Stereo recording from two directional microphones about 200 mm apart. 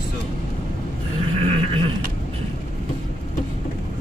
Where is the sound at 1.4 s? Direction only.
25° right (ahead or behind).